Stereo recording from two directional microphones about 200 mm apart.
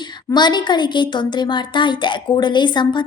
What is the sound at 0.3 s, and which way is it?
A woman's voice, 20° left (ahead or behind).